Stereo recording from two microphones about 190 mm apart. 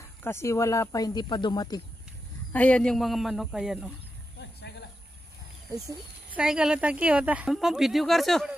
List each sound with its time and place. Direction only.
0.2 s speech: 15° left (ahead or behind)
2.5 s a woman's voice: 5° left (ahead or behind)
4.4 s a sound: 60° left (ahead or behind)
6.3 s a woman's voice: 5° right (ahead or behind)